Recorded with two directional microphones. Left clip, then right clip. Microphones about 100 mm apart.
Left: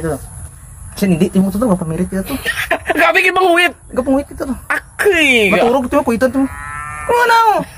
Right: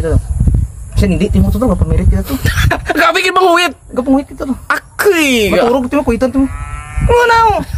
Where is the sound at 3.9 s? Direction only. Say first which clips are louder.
Right 2 dB; 15° right (ahead or behind).